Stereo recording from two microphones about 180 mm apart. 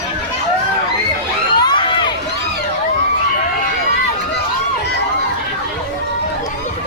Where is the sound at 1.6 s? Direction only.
25° left (ahead or behind).